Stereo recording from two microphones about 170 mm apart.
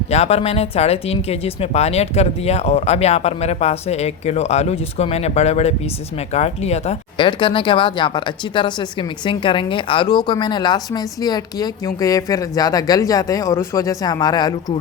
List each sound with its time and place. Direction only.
0.1 s speech: 40° left (ahead or behind)